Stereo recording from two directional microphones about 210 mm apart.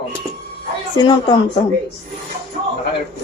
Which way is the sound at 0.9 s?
20° left (ahead or behind).